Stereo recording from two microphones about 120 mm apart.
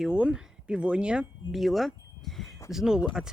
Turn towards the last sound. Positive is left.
turn(degrees=-5)  # may be behind; listen again after turning